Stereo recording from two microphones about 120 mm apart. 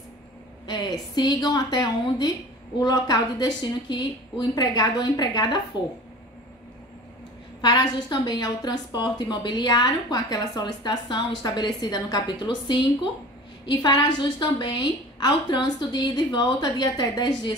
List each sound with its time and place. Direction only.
0.7 s a woman's voice: 35° left (ahead or behind)
7.6 s a woman's voice: 40° left (ahead or behind)